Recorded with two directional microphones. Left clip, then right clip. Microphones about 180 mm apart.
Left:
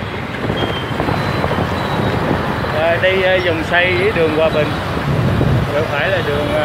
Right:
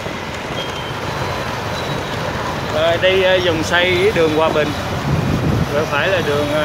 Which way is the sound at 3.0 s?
20° right (ahead or behind).